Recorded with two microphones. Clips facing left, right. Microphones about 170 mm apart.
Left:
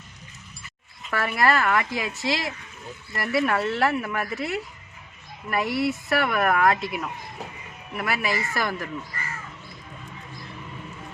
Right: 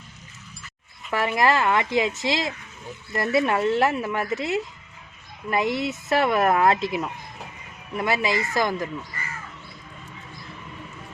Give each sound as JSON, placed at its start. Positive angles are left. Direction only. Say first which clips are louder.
{"t": 1.1, "sound": "speech", "louder": "right 2 dB", "side_deg": -20}